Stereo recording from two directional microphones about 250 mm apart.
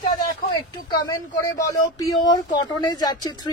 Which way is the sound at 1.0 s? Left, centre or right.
Centre.